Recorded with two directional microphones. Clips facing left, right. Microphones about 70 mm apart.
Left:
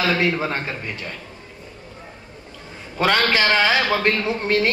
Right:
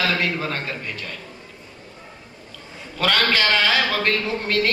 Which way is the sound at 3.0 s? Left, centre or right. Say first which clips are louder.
Left 2 dB; left.